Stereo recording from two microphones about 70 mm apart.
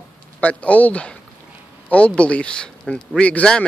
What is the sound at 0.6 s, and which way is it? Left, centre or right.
Speech, centre.